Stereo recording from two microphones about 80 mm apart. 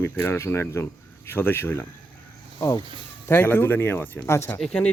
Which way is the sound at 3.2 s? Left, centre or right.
Left.